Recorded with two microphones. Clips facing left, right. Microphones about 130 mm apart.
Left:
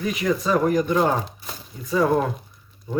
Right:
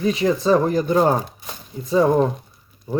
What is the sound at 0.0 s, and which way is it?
Speech, 30° right (ahead or behind).